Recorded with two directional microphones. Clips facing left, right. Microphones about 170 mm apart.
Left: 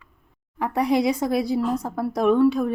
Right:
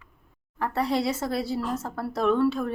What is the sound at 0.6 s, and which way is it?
Speech, 15° left (ahead or behind).